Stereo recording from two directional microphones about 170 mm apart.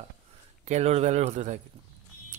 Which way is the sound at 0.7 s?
40° right (ahead or behind).